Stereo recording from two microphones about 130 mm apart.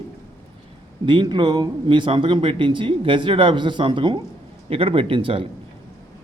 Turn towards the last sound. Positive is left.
turn(degrees=-45)  # may be behind; listen again after turning